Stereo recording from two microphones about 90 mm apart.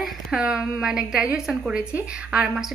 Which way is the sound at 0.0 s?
5° right (ahead or behind).